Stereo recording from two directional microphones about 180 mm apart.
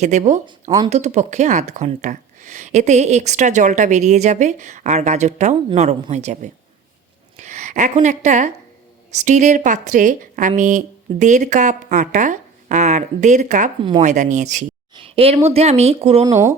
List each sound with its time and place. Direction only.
0.0 s speech: 40° right (ahead or behind)
14.9 s a sound: 30° right (ahead or behind)
15.4 s speech: 35° right (ahead or behind)
16.2 s speech: 15° right (ahead or behind)